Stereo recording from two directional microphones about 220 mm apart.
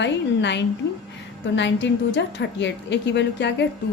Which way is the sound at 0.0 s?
50° left (ahead or behind).